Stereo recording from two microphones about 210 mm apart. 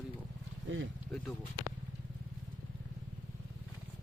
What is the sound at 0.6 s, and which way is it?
Speech, 65° right (ahead or behind).